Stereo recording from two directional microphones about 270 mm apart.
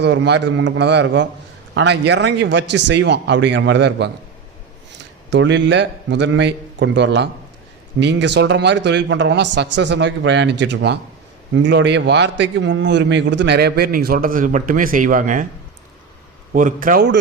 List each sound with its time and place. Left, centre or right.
0.0 s a man's voice: right
5.3 s a man's voice: right
16.5 s a man's voice: right